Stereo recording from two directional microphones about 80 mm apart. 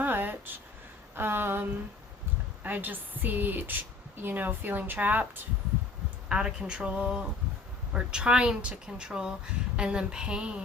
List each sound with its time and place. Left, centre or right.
0.0 s a sound: right
1.1 s a woman's voice: right
6.2 s speech: centre